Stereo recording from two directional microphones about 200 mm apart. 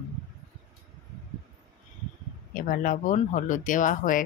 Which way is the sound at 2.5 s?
45° left (ahead or behind).